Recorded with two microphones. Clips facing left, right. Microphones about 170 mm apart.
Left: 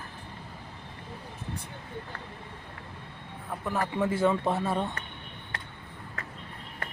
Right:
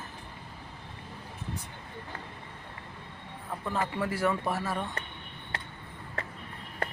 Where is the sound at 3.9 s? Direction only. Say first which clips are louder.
Left 6 dB; 20° left (ahead or behind).